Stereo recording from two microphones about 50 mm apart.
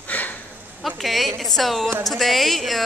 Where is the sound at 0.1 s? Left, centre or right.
Left.